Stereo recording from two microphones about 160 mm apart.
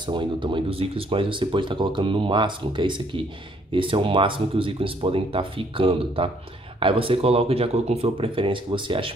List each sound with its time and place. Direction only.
0.0 s speech: 30° right (ahead or behind)